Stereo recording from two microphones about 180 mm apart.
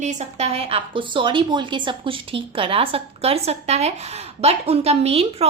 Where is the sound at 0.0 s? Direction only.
40° right (ahead or behind).